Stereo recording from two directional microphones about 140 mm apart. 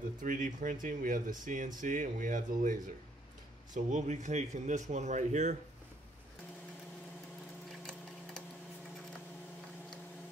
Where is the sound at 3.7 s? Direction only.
60° right (ahead or behind).